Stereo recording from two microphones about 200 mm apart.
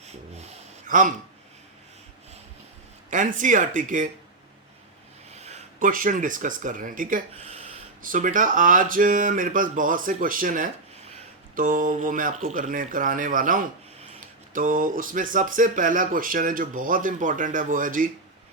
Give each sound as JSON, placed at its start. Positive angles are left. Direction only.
{"t": 0.0, "sound": "snort", "side_deg": -35}
{"t": 3.1, "sound": "speech", "side_deg": -40}
{"t": 5.3, "sound": "speech", "side_deg": -35}